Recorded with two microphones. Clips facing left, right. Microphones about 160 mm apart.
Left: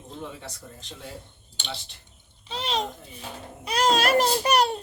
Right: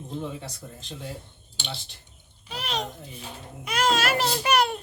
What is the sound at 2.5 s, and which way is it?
A child's voice, 25° left (ahead or behind).